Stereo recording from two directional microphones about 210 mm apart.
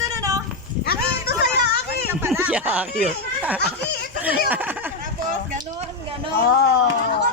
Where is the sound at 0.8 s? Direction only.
50° left (ahead or behind).